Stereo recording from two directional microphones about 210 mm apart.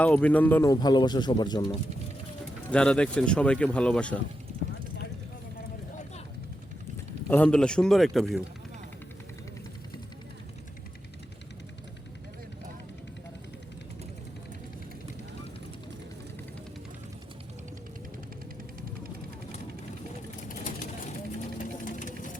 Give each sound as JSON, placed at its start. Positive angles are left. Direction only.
{"t": 0.0, "sound": "speech", "side_deg": 5}
{"t": 2.6, "sound": "speech", "side_deg": 5}
{"t": 7.3, "sound": "speech", "side_deg": 5}
{"t": 20.5, "sound": "vehicle", "side_deg": 35}
{"t": 21.6, "sound": "sewing machine", "side_deg": 40}